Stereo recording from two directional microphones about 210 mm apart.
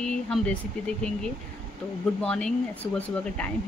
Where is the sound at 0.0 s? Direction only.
5° left (ahead or behind).